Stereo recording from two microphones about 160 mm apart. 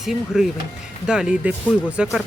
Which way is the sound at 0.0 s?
Centre (ahead or behind).